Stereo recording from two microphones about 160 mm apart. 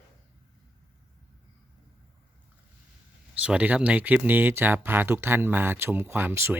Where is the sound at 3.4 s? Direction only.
5° right (ahead or behind).